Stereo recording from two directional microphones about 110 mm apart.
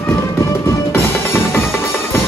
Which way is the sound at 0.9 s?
20° left (ahead or behind).